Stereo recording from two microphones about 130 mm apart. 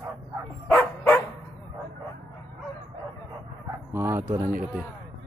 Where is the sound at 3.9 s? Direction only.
20° right (ahead or behind).